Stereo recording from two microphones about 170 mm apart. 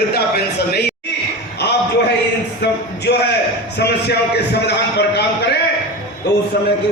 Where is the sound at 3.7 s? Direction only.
75° left (ahead or behind).